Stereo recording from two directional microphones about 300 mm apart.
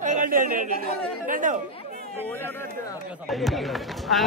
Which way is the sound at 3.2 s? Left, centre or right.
Centre.